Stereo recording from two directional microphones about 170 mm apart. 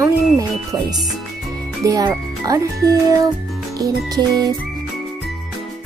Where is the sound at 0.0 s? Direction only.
20° right (ahead or behind).